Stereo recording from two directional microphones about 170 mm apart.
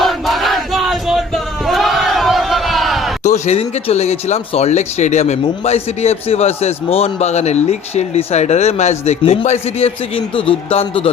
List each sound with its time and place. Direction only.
0.0 s battle cry: centre (ahead or behind)
3.2 s speech: 40° left (ahead or behind)